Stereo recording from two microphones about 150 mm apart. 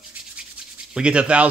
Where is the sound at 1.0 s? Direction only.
5° right (ahead or behind).